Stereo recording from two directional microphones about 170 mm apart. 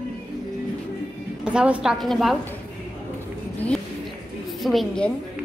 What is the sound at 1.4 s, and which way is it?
Speech, 5° right (ahead or behind).